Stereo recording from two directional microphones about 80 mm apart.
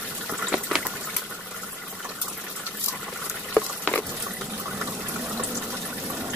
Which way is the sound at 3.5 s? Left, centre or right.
Centre.